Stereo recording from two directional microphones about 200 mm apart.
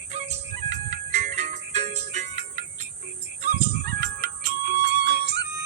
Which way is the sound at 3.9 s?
55° right (ahead or behind).